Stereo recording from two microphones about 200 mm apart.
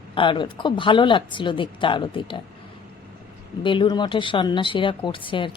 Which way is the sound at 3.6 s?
25° left (ahead or behind).